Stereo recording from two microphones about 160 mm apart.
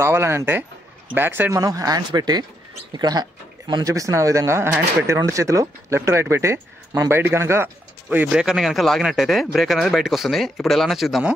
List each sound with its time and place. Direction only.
0.0 s speech: 15° right (ahead or behind)